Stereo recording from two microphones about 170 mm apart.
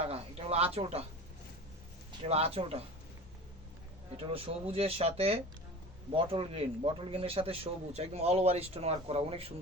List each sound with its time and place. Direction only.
0.0 s a man's voice: 35° right (ahead or behind)
2.2 s a man's voice: 35° right (ahead or behind)
4.2 s a man's voice: 35° right (ahead or behind)